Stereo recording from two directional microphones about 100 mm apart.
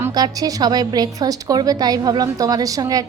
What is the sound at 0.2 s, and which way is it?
A woman's voice, 40° right (ahead or behind).